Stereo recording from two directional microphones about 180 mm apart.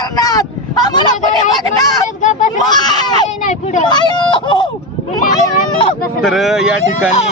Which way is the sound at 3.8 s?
25° left (ahead or behind).